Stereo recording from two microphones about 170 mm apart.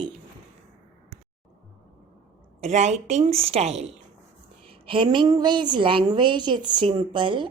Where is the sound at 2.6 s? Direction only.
40° right (ahead or behind).